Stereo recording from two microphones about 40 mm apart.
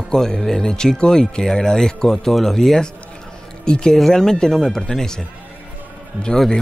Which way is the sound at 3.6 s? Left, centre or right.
Left.